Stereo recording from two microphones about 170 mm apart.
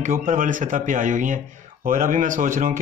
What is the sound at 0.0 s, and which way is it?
A man's voice, 55° right (ahead or behind).